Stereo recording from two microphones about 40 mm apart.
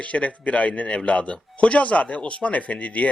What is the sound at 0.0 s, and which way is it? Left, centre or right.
A man's voice, left.